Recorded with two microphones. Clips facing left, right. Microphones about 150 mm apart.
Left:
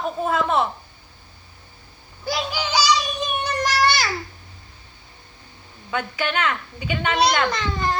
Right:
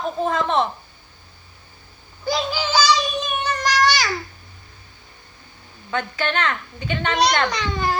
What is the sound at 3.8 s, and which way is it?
Babbling, 5° left (ahead or behind).